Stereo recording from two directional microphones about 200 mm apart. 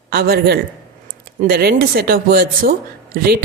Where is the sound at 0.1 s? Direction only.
50° right (ahead or behind).